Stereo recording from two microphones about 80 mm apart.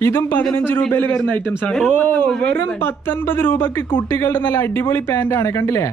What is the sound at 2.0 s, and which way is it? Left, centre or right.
Speech, centre.